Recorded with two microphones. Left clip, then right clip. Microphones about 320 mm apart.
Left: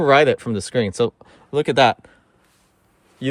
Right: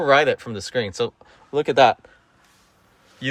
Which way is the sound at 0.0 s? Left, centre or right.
Left.